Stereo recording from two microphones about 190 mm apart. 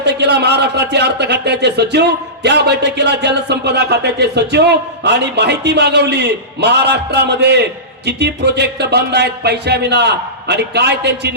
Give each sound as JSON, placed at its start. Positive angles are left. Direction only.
{"t": 0.0, "sound": "speech", "side_deg": -60}